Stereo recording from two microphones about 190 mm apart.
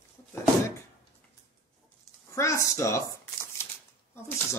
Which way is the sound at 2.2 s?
15° left (ahead or behind).